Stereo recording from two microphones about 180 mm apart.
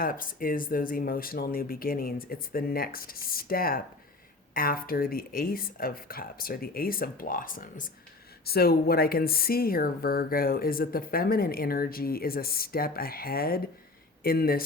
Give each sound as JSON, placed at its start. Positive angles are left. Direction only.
{"t": 0.0, "sound": "speech", "side_deg": 50}